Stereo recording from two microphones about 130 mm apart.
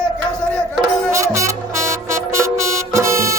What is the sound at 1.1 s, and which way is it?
Music, 25° right (ahead or behind).